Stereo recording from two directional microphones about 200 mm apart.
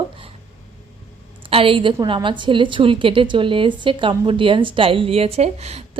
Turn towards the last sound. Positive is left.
turn(degrees=-30)  # may be behind; listen again after turning